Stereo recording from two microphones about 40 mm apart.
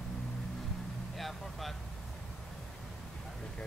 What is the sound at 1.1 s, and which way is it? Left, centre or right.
Vehicle, centre.